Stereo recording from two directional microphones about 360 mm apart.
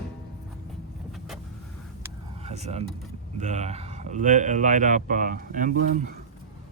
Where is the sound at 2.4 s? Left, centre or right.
Centre.